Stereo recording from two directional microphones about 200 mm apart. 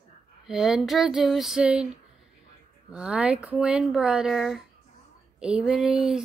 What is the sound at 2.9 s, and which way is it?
Speech, 5° right (ahead or behind).